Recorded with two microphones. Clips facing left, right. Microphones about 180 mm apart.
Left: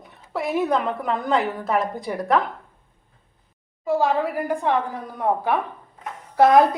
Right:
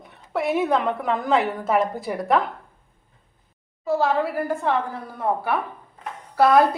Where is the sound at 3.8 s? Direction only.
15° left (ahead or behind).